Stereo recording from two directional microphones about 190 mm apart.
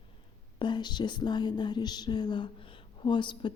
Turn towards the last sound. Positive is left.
turn(degrees=25)  # may be behind; listen again after turning